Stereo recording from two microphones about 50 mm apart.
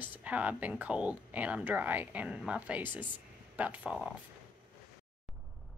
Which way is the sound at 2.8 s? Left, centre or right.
Right.